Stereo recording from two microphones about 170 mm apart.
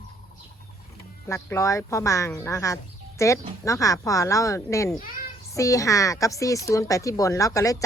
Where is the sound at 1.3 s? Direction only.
15° left (ahead or behind).